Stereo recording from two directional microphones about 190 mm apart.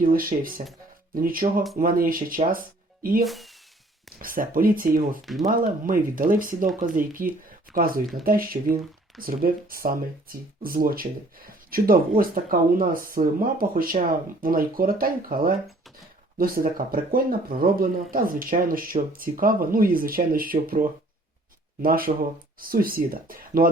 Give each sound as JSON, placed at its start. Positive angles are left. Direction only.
{"t": 0.0, "sound": "speech", "side_deg": -50}
{"t": 3.2, "sound": "speech", "side_deg": 0}
{"t": 4.2, "sound": "speech", "side_deg": -45}
{"t": 5.2, "sound": "speech", "side_deg": 0}
{"t": 5.5, "sound": "speech", "side_deg": -50}